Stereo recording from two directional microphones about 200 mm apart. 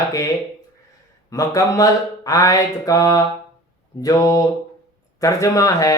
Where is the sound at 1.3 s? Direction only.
15° left (ahead or behind).